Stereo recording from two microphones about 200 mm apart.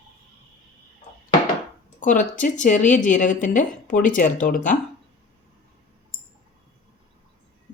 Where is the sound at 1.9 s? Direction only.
40° left (ahead or behind).